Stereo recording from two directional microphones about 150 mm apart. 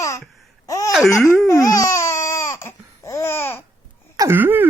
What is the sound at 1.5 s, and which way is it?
Baby cry, 20° left (ahead or behind).